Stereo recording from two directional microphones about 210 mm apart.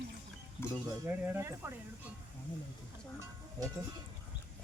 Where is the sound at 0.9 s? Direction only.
10° right (ahead or behind).